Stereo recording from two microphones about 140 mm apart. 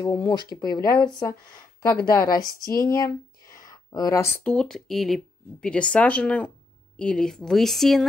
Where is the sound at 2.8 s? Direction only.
25° left (ahead or behind).